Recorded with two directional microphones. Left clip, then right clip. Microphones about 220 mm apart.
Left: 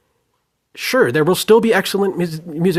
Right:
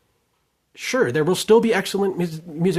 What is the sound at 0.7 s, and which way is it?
Speech, 30° left (ahead or behind).